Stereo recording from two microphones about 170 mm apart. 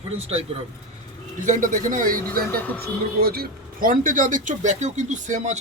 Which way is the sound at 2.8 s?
65° right (ahead or behind).